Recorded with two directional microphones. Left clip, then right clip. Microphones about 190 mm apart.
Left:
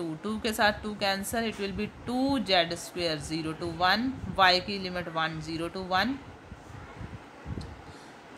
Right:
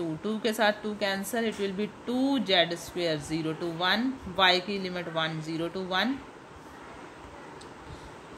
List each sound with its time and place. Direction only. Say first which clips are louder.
0.2 s a woman's voice: even; 15° left (ahead or behind)